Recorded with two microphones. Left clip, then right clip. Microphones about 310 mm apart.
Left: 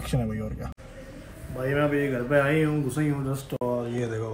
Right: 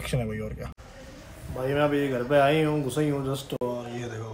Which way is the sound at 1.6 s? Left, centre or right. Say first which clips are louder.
Even; left.